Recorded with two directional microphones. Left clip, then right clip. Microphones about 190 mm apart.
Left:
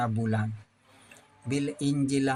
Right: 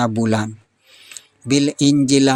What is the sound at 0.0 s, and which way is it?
Speech, 50° right (ahead or behind).